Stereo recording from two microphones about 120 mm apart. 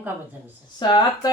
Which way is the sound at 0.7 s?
40° left (ahead or behind).